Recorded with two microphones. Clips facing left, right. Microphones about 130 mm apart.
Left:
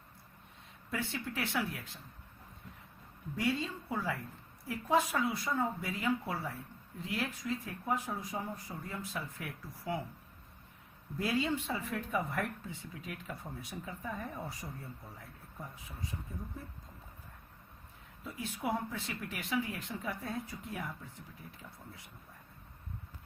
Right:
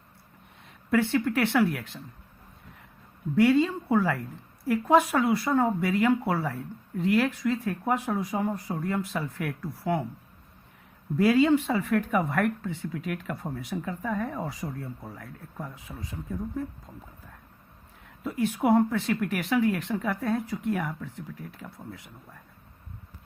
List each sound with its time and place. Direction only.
0.9 s speech: 70° right (ahead or behind)
3.3 s speech: 75° right (ahead or behind)
11.2 s speech: 80° right
18.2 s speech: 70° right (ahead or behind); by 22.0 s 90° right